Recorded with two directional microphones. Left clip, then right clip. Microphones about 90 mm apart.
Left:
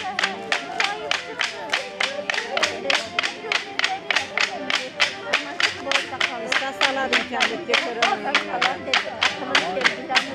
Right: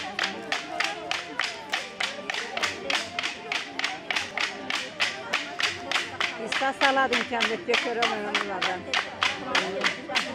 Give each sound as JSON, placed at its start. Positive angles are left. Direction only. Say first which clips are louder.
{"t": 0.2, "sound": "music", "louder": "left 5 dB", "side_deg": 25}
{"t": 7.1, "sound": "speech", "louder": "left 4 dB", "side_deg": 30}